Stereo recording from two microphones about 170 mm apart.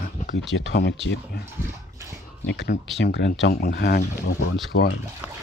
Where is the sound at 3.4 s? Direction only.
60° left (ahead or behind).